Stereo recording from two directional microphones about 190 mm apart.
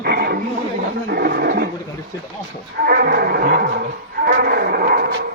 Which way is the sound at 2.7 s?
55° right (ahead or behind).